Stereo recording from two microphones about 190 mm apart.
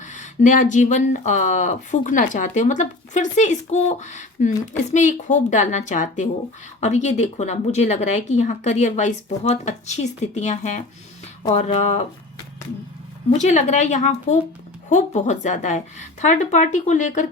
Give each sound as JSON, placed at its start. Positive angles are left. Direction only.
{"t": 0.0, "sound": "speech", "side_deg": 40}
{"t": 13.3, "sound": "speech", "side_deg": 40}